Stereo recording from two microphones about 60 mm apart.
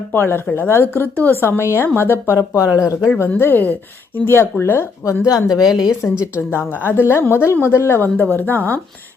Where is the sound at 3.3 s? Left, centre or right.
Left.